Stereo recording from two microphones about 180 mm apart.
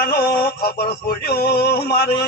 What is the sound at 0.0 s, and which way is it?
A man's voice, 60° left (ahead or behind).